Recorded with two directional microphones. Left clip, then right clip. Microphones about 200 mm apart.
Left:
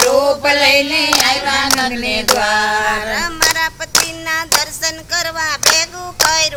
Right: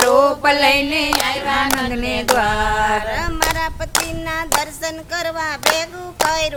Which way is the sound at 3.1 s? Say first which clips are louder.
Left 4 dB; 50° right (ahead or behind).